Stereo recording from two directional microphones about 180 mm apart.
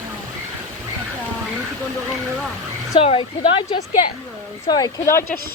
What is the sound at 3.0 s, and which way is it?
A woman's voice, 30° left (ahead or behind).